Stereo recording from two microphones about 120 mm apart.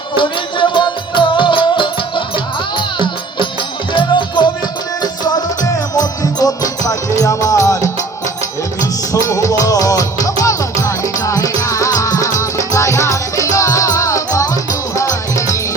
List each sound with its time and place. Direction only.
0.2 s music: 40° left (ahead or behind)
5.2 s music: 30° left (ahead or behind)